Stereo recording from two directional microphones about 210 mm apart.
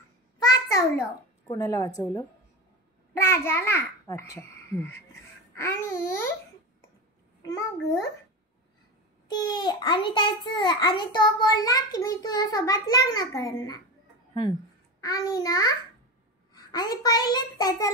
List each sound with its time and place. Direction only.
0.4 s a sound: 15° left (ahead or behind)
1.5 s a child's voice: 15° left (ahead or behind)
3.2 s a child's voice: 10° left (ahead or behind)
7.4 s a child's voice: 15° left (ahead or behind)
9.3 s a child's voice: 20° left (ahead or behind)
15.0 s a child's voice: 15° left (ahead or behind)